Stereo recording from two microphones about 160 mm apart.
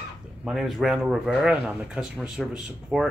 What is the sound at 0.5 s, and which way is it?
Speech, centre (ahead or behind).